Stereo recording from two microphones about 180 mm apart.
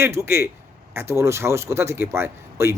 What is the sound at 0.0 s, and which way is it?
A man's voice, 15° right (ahead or behind).